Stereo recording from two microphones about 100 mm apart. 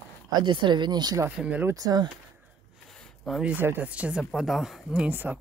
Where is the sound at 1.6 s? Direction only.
40° right (ahead or behind).